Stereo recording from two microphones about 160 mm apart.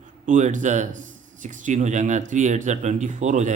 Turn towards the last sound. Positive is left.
turn(degrees=-50)  # may be behind; listen again after turning